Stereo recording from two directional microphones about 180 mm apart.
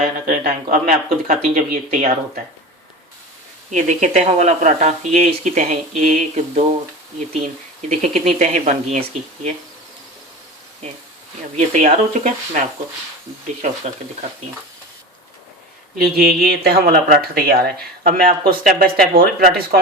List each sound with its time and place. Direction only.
0.0 s speech: 55° right (ahead or behind)
3.7 s speech: 45° right (ahead or behind)
7.8 s speech: 40° right (ahead or behind)
11.5 s speech: 40° right (ahead or behind)
16.0 s speech: 55° right (ahead or behind)